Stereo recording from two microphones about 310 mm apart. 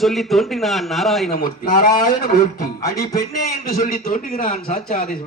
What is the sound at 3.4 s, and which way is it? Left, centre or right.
A man's voice, left.